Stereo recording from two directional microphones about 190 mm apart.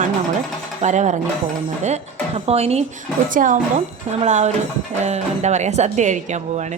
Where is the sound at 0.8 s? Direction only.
40° right (ahead or behind).